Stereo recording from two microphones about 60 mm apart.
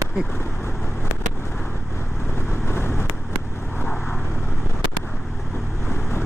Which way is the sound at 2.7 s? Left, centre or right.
Left.